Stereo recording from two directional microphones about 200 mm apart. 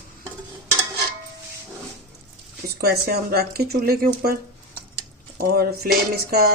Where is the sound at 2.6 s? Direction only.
50° right (ahead or behind).